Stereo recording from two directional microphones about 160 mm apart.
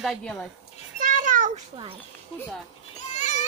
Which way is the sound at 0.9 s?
55° right (ahead or behind).